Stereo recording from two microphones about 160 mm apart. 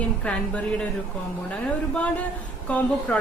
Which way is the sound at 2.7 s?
10° left (ahead or behind).